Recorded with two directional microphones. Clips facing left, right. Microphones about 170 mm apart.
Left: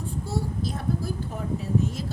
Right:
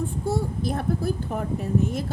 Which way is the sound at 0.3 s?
55° right (ahead or behind).